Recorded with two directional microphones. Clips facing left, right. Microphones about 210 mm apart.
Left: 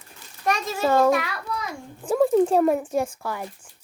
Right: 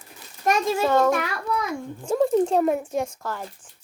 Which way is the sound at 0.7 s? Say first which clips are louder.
Left 4 dB; 10° left (ahead or behind).